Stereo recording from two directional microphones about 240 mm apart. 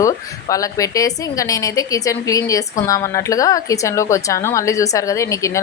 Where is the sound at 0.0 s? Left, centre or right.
Centre.